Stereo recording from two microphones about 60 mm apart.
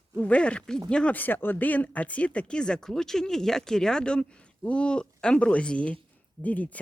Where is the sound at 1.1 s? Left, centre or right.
Left.